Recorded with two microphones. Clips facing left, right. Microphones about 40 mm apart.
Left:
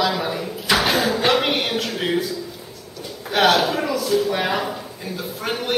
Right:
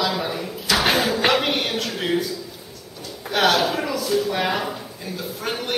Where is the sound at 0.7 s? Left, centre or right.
Left.